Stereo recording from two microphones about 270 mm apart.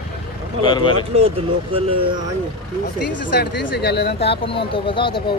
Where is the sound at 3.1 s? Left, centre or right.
Left.